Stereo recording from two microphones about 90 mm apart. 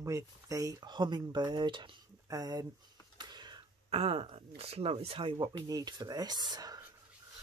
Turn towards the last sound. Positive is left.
turn(degrees=-45)  # may be behind; listen again after turning